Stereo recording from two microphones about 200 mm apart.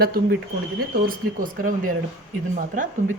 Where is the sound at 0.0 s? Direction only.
50° right (ahead or behind).